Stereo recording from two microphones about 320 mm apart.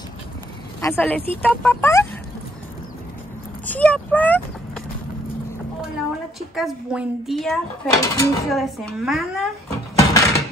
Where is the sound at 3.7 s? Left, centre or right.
Centre.